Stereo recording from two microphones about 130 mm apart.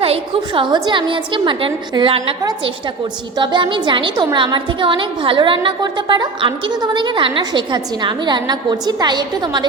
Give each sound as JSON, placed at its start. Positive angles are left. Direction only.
{"t": 0.0, "sound": "a woman's voice", "side_deg": -45}
{"t": 3.3, "sound": "a woman's voice", "side_deg": -35}